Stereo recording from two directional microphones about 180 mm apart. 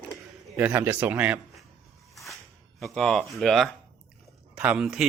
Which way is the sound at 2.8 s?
Centre (ahead or behind).